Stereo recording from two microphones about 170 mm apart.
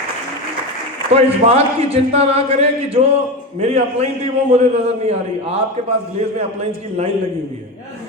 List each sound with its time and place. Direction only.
1.1 s a man's voice: 35° right (ahead or behind)